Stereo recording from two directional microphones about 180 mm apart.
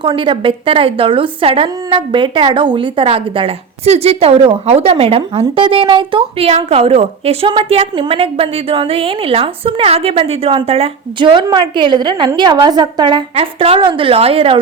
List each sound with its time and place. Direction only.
0.0 s a woman's voice: 25° right (ahead or behind)